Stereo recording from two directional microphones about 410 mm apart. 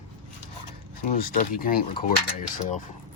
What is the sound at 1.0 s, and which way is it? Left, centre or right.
Speech, left.